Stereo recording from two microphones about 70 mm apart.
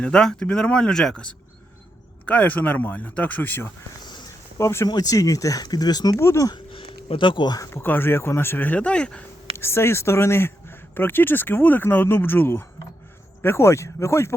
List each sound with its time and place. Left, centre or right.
0.0 s speech: centre; by 3.7 s left
4.0 s a sound: left
4.3 s a sound: left
4.9 s speech: left
6.1 s speech: left
7.7 s speech: left; by 9.2 s centre
9.6 s speech: left